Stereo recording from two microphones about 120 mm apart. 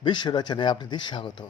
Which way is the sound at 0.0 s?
40° left (ahead or behind).